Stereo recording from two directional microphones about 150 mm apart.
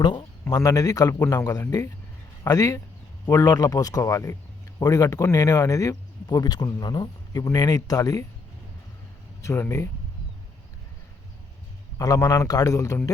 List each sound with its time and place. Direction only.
0.0 s speech: 30° left (ahead or behind)
0.4 s speech: 20° left (ahead or behind)
9.4 s speech: 20° left (ahead or behind)
11.9 s speech: 20° left (ahead or behind)